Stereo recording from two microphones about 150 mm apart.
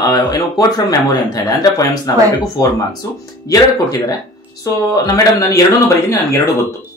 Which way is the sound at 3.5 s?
25° left (ahead or behind).